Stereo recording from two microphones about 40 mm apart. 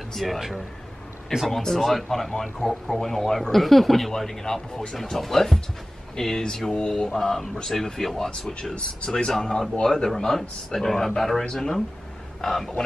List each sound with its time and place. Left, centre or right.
0.1 s speech: centre
1.5 s speech: centre
8.5 s speech: left
9.3 s speech: centre